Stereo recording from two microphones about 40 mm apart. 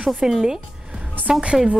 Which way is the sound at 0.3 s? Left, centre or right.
Centre.